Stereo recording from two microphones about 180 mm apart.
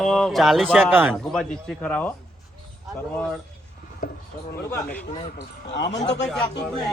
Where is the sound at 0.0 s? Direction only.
Centre (ahead or behind).